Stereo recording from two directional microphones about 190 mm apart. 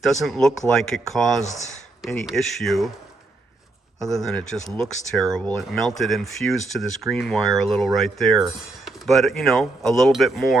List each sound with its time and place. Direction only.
0.0 s speech: centre (ahead or behind)
4.0 s speech: centre (ahead or behind)